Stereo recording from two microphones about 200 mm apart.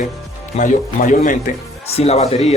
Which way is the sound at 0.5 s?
40° left (ahead or behind).